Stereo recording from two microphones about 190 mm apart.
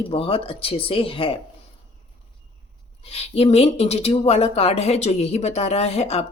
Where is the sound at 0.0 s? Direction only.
30° left (ahead or behind).